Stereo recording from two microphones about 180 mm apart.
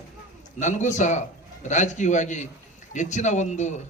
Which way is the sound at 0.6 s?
40° left (ahead or behind).